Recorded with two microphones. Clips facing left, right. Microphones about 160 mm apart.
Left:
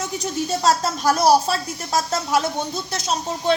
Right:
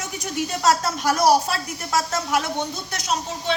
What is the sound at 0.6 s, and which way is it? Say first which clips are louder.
A woman's voice: even; 30° left (ahead or behind).